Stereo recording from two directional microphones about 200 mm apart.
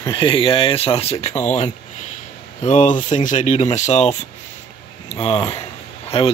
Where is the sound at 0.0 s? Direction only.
25° left (ahead or behind).